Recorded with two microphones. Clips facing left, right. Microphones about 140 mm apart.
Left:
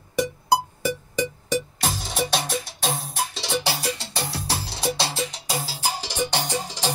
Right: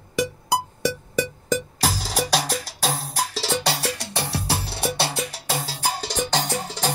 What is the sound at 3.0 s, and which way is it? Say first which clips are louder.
Music: right 2 dB; 70° right (ahead or behind).